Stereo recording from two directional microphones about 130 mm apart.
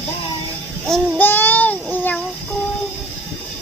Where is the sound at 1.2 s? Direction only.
15° left (ahead or behind).